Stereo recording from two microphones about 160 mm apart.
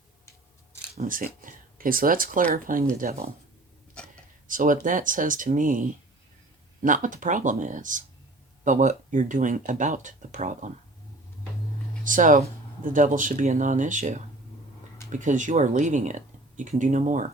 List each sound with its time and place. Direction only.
1.0 s speech: 60° right (ahead or behind)
4.4 s speech: 55° right (ahead or behind)
12.0 s speech: 55° right (ahead or behind)